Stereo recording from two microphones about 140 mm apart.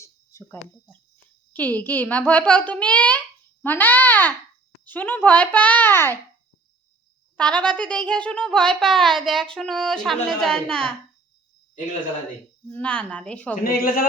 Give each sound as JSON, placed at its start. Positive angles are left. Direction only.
{"t": 0.0, "sound": "a child's voice", "side_deg": 20}
{"t": 7.3, "sound": "a child's voice", "side_deg": 5}
{"t": 12.7, "sound": "a child's voice", "side_deg": 5}
{"t": 13.8, "sound": "a man's voice", "side_deg": 90}